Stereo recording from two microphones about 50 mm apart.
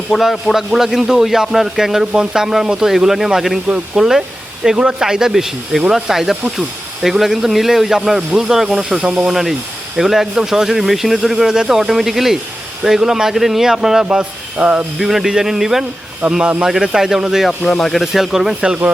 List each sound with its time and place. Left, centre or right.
0.1 s speech: centre
9.0 s speech: right
9.2 s speech: centre
14.0 s speech: centre
14.9 s speech: centre
16.4 s speech: right
16.6 s speech: centre
17.4 s speech: centre
18.0 s speech: centre